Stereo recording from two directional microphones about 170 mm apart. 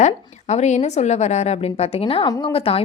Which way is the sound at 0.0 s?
40° left (ahead or behind).